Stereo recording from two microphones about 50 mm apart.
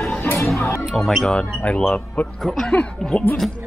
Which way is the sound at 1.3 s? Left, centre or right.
Left.